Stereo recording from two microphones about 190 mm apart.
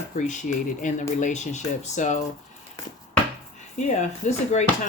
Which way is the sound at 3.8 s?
40° left (ahead or behind).